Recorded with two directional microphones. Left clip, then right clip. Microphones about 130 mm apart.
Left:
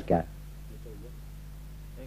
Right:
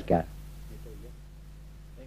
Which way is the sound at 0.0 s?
25° left (ahead or behind).